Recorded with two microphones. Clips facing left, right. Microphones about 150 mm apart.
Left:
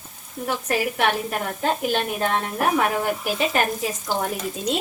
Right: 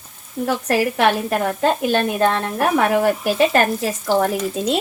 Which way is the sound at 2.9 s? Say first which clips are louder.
Right 7 dB; 80° right.